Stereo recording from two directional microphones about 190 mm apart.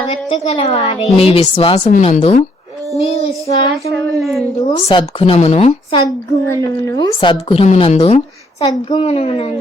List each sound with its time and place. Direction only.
0.1 s a woman's voice: 30° left (ahead or behind)
4.2 s a woman's voice: centre (ahead or behind)
4.9 s a woman's voice: 30° left (ahead or behind)
5.9 s a woman's voice: 20° left (ahead or behind)
8.6 s a woman's voice: 20° left (ahead or behind)